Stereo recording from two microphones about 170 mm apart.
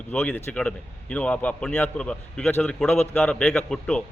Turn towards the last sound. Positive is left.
turn(degrees=5)  # may be behind; listen again after turning